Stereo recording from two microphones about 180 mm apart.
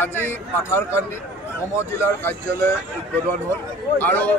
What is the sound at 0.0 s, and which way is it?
A man's voice, 10° left (ahead or behind).